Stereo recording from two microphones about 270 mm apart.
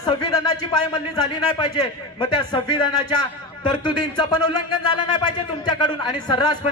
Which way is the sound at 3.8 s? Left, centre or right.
Centre.